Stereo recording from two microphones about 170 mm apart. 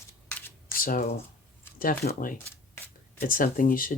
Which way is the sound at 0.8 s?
60° left (ahead or behind).